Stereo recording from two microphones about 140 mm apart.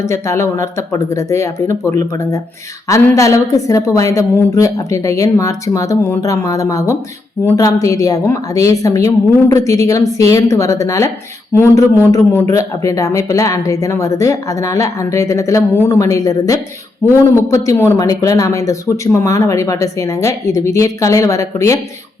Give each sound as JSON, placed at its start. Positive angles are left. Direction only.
{"t": 0.0, "sound": "a man's voice", "side_deg": 20}